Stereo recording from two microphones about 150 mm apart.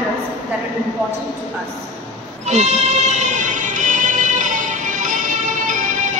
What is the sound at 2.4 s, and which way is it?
Music, 50° right (ahead or behind).